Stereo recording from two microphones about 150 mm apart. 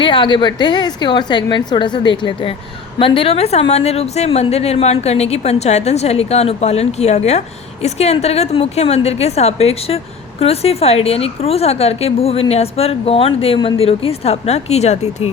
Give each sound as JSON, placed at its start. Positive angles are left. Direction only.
{"t": 0.0, "sound": "a woman's voice", "side_deg": 35}